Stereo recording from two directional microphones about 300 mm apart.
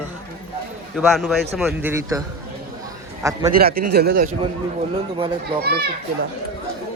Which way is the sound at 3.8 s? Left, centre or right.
Right.